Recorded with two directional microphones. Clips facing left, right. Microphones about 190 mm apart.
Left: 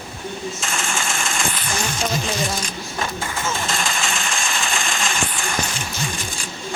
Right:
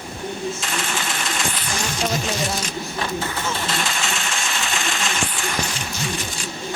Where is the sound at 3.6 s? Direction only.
45° left (ahead or behind).